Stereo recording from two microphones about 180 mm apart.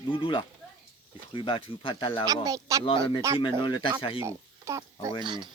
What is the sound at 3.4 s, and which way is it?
Speech, 25° left (ahead or behind).